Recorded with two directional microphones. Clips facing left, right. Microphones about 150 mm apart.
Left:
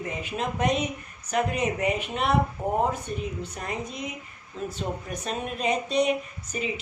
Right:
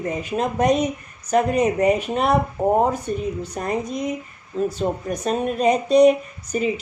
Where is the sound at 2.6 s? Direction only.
85° right.